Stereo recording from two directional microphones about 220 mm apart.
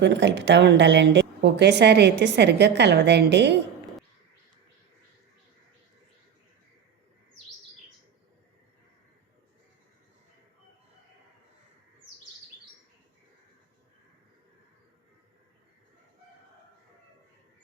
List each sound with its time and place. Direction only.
0.0 s a woman's voice: 55° right (ahead or behind)